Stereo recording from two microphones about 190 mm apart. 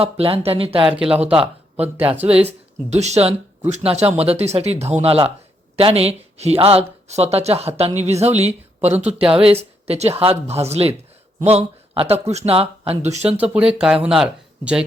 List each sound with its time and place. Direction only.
0.0 s speech: 30° right (ahead or behind)
0.9 s speech: 5° right (ahead or behind)
2.3 s speech: 35° right (ahead or behind)
9.0 s speech: 5° right (ahead or behind)
9.4 s speech: 30° right (ahead or behind)
13.3 s speech: 5° right (ahead or behind)